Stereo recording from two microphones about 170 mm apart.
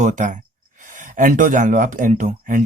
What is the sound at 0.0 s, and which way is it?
Speech, 50° right (ahead or behind).